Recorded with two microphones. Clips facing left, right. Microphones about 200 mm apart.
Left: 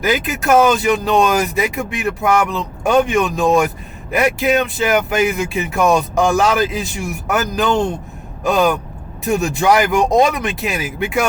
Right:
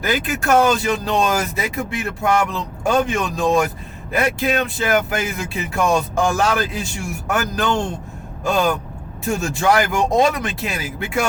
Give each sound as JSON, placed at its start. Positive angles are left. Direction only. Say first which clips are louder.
{"t": 0.0, "sound": "speech", "louder": "left 3 dB", "side_deg": 20}